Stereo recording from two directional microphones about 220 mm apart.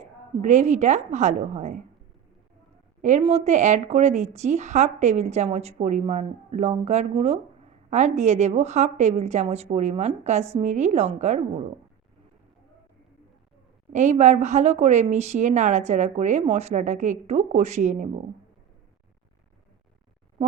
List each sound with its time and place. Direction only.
0.0 s speech: 30° right (ahead or behind)
3.0 s speech: 30° right (ahead or behind)
13.9 s speech: 30° right (ahead or behind)